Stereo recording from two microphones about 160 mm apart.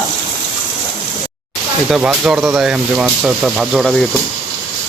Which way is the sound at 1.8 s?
5° right (ahead or behind).